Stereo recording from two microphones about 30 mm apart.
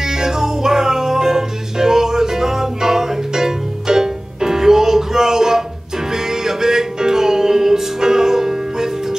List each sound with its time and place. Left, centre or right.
0.0 s music: centre